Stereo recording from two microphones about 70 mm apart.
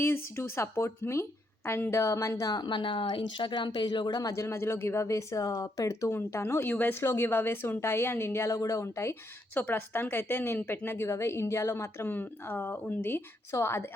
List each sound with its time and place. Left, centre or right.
0.0 s a woman's voice: left
4.3 s a woman's voice: left
6.1 s a woman's voice: left
9.7 s a woman's voice: left
11.0 s a woman's voice: left
12.0 s a woman's voice: left